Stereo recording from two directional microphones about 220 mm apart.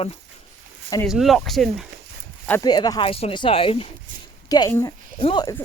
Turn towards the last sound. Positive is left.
turn(degrees=20)  # may be behind; listen again after turning